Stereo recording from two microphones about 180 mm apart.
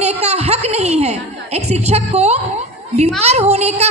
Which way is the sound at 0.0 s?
35° right (ahead or behind).